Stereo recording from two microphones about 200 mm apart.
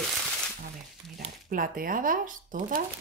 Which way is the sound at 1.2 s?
45° right (ahead or behind).